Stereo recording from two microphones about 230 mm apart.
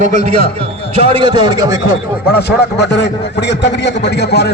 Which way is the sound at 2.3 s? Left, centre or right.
Left.